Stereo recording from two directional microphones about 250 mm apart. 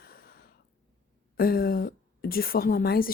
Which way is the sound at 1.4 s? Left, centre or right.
Left.